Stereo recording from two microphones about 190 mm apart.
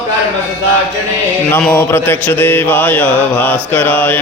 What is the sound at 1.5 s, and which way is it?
Mantra, 5° left (ahead or behind).